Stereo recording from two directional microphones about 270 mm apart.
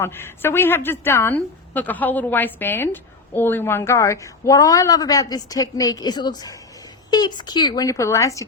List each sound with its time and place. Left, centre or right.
0.0 s a woman's voice: centre